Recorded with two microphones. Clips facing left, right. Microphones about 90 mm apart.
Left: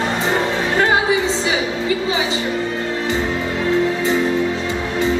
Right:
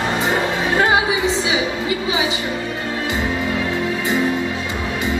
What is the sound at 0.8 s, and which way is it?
Music, 15° right (ahead or behind).